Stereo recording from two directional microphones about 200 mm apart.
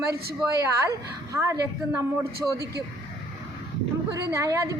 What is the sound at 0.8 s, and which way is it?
A woman's voice, 15° right (ahead or behind).